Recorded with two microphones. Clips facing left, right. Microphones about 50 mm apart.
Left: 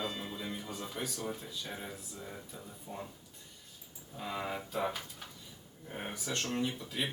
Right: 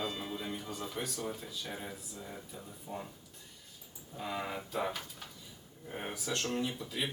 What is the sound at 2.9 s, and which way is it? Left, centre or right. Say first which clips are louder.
Speech: right 2 dB; centre.